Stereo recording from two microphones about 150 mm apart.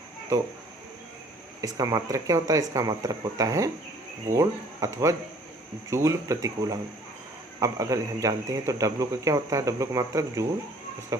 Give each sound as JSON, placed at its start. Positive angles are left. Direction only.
{"t": 1.6, "sound": "a man's voice", "side_deg": -25}